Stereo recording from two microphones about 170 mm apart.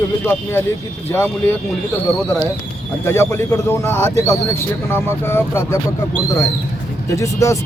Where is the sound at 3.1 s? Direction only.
15° left (ahead or behind).